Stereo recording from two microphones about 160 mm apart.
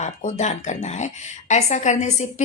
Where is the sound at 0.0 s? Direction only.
45° left (ahead or behind).